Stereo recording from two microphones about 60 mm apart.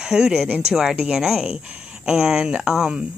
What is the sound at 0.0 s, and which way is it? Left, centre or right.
Speech, centre.